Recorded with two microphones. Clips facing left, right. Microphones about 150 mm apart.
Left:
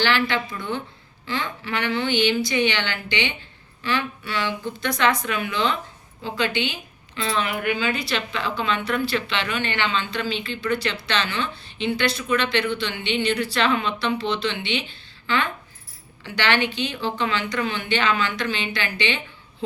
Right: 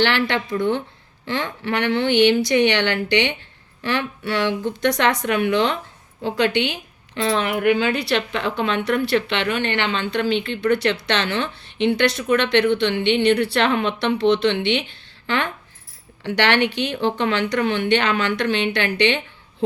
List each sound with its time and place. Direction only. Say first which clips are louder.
0.0 s a woman's voice: right 3 dB; 65° right (ahead or behind)
16.2 s a woman's voice: right 4 dB; 70° right (ahead or behind)